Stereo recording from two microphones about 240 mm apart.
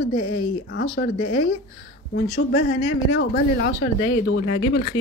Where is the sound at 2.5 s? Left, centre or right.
Left.